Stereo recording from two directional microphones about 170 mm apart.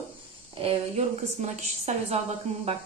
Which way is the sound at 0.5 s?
35° right (ahead or behind).